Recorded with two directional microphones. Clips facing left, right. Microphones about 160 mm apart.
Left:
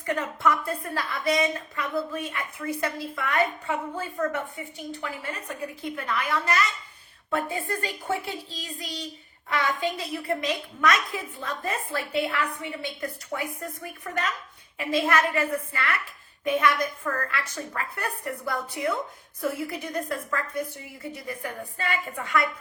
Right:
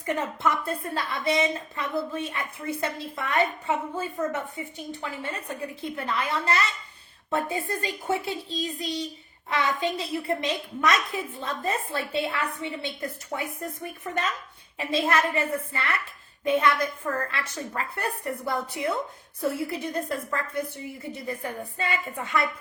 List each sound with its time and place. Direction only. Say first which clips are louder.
0.0 s a woman's voice: left 1 dB; 25° right (ahead or behind)